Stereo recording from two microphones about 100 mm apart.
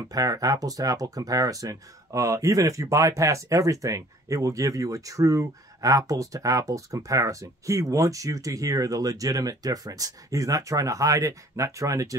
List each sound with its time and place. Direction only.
0.1 s speech: 40° right (ahead or behind)